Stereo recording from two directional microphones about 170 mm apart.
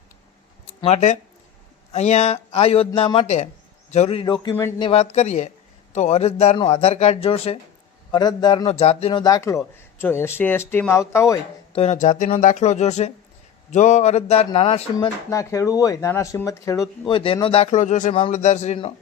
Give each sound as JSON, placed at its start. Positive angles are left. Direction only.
{"t": 0.7, "sound": "a man's voice", "side_deg": 40}
{"t": 8.1, "sound": "a man's voice", "side_deg": 25}
{"t": 8.6, "sound": "a man's voice", "side_deg": 40}
{"t": 9.2, "sound": "a man's voice", "side_deg": 20}
{"t": 11.7, "sound": "a man's voice", "side_deg": 40}
{"t": 14.9, "sound": "speech", "side_deg": 20}
{"t": 17.1, "sound": "a man's voice", "side_deg": 30}